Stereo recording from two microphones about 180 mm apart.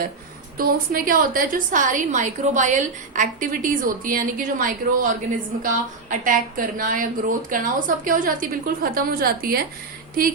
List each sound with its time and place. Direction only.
0.5 s a woman's voice: 55° right (ahead or behind)